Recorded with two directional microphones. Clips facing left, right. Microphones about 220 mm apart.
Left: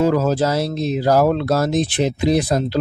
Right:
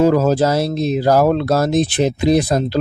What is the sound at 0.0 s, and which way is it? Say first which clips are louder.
Speech: right 3 dB; 45° right (ahead or behind).